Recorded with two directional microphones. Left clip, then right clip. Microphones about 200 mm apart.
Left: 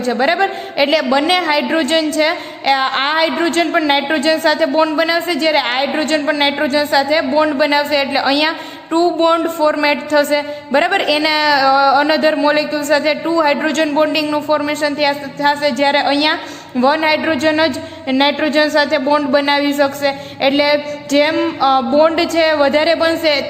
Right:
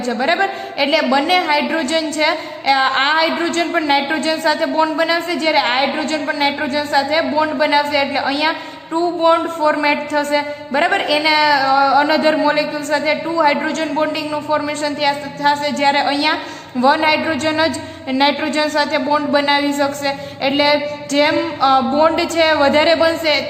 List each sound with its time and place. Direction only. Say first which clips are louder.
0.0 s a woman's voice: left 2 dB; 30° left (ahead or behind)